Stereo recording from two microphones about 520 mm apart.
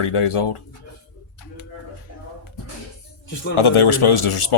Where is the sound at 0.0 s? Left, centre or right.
Left.